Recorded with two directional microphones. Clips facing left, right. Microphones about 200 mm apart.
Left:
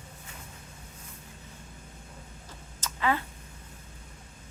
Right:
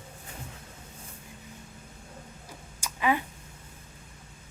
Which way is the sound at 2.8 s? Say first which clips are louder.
Right 2 dB; 15° right (ahead or behind).